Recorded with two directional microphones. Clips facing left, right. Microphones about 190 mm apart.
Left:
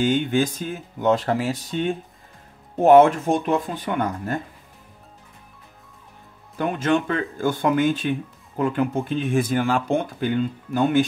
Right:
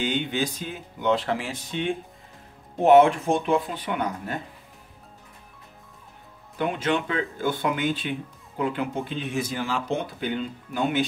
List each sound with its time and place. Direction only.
0.0 s speech: 45° left (ahead or behind)
6.6 s speech: 45° left (ahead or behind)